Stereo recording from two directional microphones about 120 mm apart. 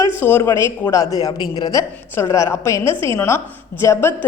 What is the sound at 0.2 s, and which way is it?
A woman's voice, 20° left (ahead or behind).